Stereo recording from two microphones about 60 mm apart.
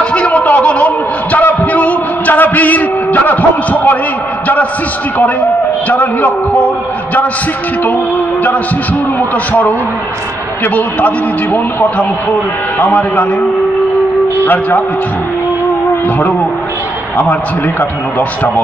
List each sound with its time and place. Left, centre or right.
0.0 s a sound: centre
5.9 s a man's voice: left
9.5 s a man's voice: left
14.4 s a man's voice: left
17.2 s a man's voice: left